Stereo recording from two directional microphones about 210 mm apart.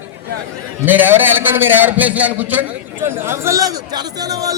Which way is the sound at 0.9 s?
10° right (ahead or behind).